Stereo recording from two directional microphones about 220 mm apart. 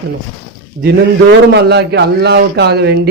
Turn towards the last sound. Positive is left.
turn(degrees=-50)  # may be behind; listen again after turning